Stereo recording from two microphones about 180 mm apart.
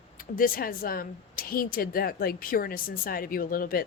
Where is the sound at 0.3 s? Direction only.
50° left (ahead or behind).